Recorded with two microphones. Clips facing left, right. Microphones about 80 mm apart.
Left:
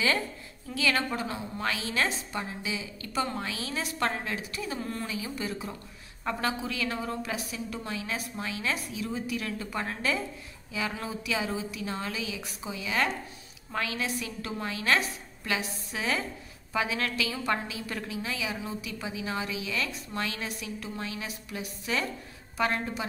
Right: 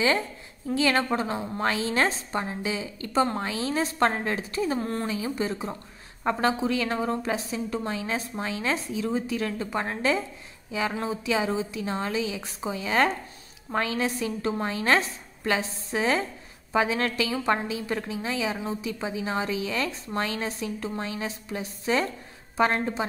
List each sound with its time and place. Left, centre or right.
0.7 s a woman's voice: right